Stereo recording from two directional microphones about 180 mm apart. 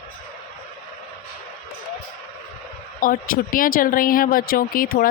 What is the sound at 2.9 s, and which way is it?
Speech, 50° left (ahead or behind).